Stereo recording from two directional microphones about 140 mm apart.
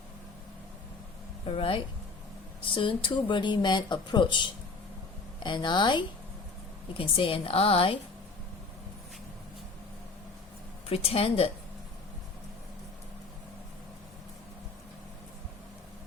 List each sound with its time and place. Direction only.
1.5 s a woman's voice: 40° left (ahead or behind)
10.8 s a woman's voice: 45° left (ahead or behind)